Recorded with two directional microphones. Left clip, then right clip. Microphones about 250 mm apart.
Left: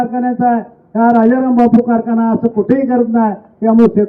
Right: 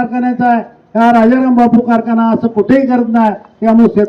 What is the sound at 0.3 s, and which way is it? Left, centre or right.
A man's voice, centre.